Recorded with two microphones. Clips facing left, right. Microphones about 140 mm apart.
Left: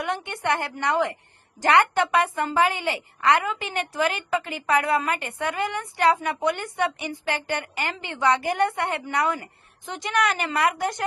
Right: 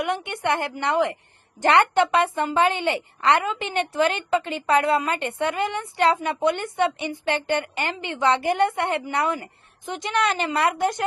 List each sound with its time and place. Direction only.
0.0 s a woman's voice: 20° right (ahead or behind)